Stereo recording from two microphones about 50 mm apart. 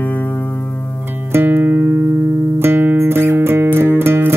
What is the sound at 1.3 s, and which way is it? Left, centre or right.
Music, right.